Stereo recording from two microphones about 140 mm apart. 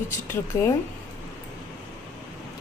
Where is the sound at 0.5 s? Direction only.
20° left (ahead or behind).